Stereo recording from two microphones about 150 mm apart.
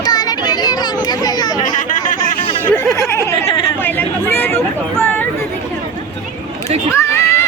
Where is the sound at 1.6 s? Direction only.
60° left (ahead or behind).